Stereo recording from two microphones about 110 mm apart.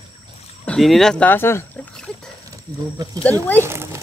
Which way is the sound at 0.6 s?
5° left (ahead or behind).